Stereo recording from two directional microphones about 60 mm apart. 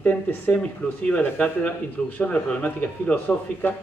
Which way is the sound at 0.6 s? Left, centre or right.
Centre.